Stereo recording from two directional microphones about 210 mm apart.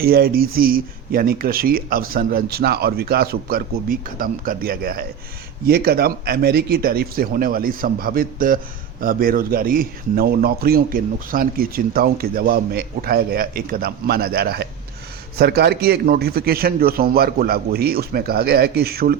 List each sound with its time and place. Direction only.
0.0 s speech: 45° right (ahead or behind)